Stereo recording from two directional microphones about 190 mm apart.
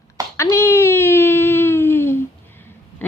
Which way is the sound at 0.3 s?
15° left (ahead or behind).